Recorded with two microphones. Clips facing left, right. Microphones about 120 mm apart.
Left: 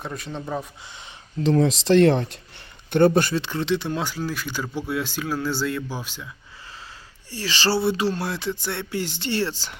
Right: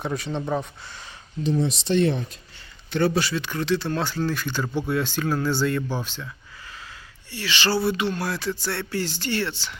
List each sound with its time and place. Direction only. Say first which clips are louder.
0.0 s speech: right 4 dB; centre (ahead or behind)
1.5 s speech: left 5 dB; 90° left
2.9 s speech: left 5 dB; 50° left (ahead or behind)
3.3 s speech: left 1 dB; 25° left (ahead or behind); by 6.2 s 5° left (ahead or behind)
7.3 s speech: left 1 dB; 35° left (ahead or behind)